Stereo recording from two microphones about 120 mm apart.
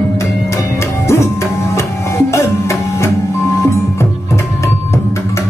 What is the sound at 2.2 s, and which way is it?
Music, 25° left (ahead or behind).